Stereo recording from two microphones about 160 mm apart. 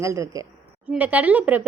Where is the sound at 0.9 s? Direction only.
10° right (ahead or behind).